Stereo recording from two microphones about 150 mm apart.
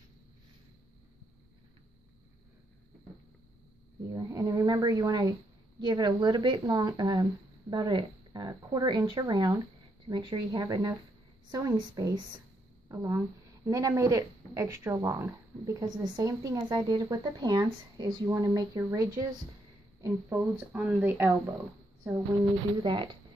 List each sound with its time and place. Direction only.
4.1 s a woman's voice: 20° right (ahead or behind)